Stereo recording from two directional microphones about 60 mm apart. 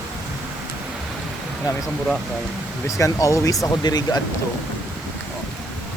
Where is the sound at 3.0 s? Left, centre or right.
Left.